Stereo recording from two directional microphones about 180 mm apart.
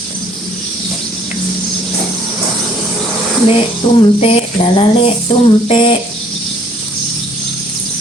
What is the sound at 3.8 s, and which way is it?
Speech, 25° left (ahead or behind).